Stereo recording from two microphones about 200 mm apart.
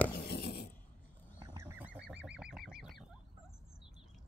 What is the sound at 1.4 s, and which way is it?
Goose, 15° right (ahead or behind).